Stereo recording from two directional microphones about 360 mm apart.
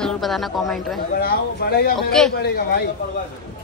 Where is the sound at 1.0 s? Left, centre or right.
Left.